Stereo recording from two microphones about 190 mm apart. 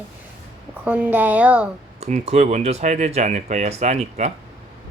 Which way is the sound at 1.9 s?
35° right (ahead or behind).